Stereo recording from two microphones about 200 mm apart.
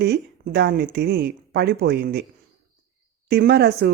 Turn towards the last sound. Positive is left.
turn(degrees=-50)  # may be behind; listen again after turning